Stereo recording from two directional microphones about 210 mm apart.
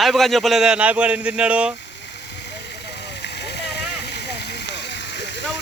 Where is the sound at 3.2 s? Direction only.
50° left (ahead or behind).